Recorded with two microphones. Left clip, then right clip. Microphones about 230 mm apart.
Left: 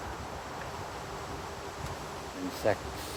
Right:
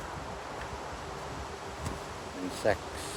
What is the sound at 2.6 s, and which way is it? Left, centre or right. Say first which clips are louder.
Speech: right 1 dB; centre.